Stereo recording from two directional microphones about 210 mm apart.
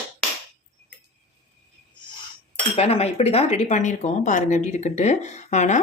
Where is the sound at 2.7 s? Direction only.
30° left (ahead or behind).